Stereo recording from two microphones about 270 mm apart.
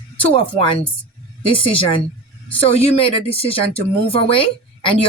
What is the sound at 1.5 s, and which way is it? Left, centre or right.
Speech, centre.